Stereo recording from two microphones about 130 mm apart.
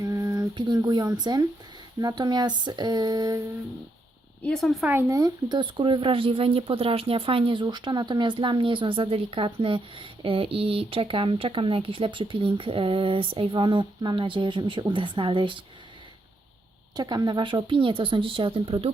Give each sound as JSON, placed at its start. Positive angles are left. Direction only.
{"t": 0.0, "sound": "a sound", "side_deg": -25}
{"t": 1.2, "sound": "speech", "side_deg": -30}
{"t": 4.4, "sound": "speech", "side_deg": 5}
{"t": 4.9, "sound": "speech", "side_deg": -20}
{"t": 17.0, "sound": "speech", "side_deg": -30}